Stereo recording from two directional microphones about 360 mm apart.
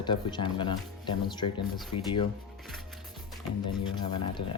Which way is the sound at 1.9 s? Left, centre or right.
Left.